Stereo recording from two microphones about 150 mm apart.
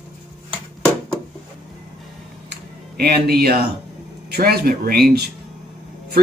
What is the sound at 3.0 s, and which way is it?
Speech, 90° right.